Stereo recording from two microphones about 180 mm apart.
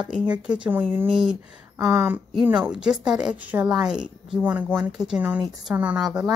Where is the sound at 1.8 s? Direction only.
15° right (ahead or behind).